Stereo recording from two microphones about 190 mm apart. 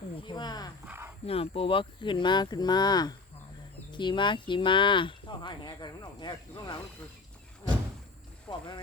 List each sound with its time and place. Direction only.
0.2 s wild animals: 25° left (ahead or behind)
0.9 s a sound: 10° right (ahead or behind)
1.3 s speech: 30° left (ahead or behind)
8.4 s speech: 25° left (ahead or behind)